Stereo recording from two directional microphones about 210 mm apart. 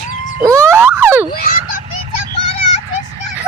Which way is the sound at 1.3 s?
45° left (ahead or behind).